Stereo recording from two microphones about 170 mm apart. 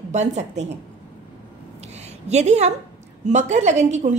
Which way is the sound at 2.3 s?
40° right (ahead or behind).